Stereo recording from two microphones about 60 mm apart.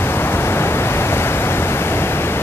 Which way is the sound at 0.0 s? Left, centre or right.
Left.